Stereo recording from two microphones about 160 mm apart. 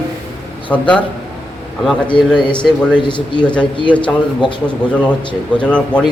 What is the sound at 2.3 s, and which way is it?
A man's voice, 30° left (ahead or behind).